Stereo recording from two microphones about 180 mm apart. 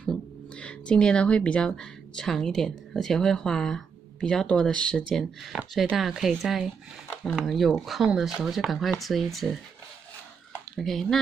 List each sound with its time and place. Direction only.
0.0 s speech: 5° left (ahead or behind)
10.8 s speech: centre (ahead or behind)